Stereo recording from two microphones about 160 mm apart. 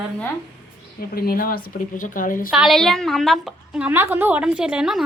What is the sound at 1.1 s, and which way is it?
Speech, 65° left (ahead or behind).